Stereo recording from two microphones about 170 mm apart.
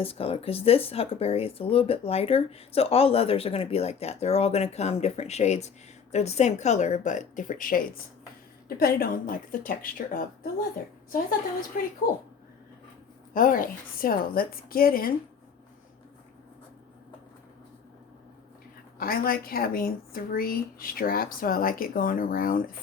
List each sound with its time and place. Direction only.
0.0 s speech: 35° left (ahead or behind); by 10.5 s 55° left (ahead or behind)
13.3 s speech: 55° left (ahead or behind)
18.9 s speech: 60° left (ahead or behind)